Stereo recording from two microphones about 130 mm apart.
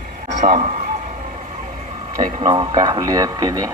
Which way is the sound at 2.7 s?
30° right (ahead or behind).